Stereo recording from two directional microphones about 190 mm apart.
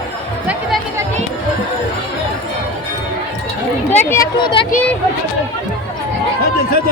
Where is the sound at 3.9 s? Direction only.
10° left (ahead or behind).